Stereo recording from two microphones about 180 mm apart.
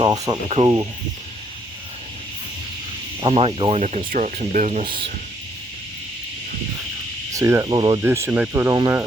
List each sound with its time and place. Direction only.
0.0 s a sound: 25° right (ahead or behind)
0.4 s speech: 35° right (ahead or behind)
3.2 s speech: 30° right (ahead or behind)
7.3 s speech: 15° right (ahead or behind)